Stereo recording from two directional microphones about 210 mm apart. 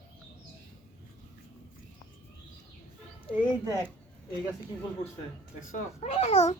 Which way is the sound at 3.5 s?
15° left (ahead or behind).